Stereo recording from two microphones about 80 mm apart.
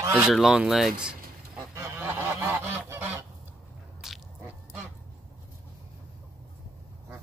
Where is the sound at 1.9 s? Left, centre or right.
Right.